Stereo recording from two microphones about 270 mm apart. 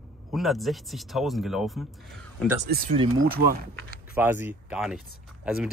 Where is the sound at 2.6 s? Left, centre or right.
Right.